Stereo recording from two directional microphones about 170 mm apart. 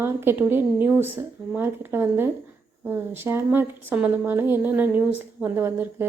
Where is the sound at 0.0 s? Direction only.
15° right (ahead or behind).